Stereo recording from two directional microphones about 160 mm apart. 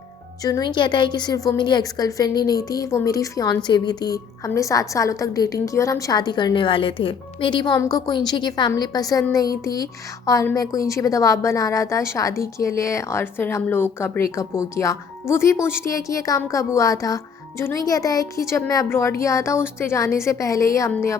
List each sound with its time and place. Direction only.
0.4 s a woman's voice: 25° left (ahead or behind)